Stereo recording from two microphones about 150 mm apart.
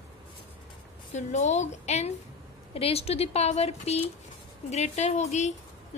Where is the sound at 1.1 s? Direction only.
50° left (ahead or behind).